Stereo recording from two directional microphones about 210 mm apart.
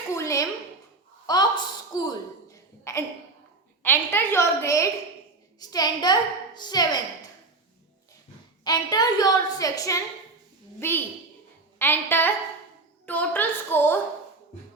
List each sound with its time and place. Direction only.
0.1 s a sound: 15° left (ahead or behind)
3.8 s a woman's voice: 10° left (ahead or behind)
8.6 s a woman's voice: 20° left (ahead or behind)